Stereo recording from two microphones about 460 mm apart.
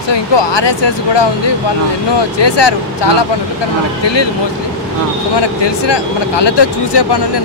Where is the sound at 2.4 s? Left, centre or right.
Left.